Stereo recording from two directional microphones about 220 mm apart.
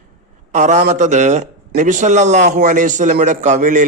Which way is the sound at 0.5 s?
35° right (ahead or behind).